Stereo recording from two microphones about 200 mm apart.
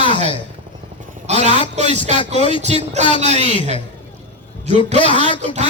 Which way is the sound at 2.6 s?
35° right (ahead or behind).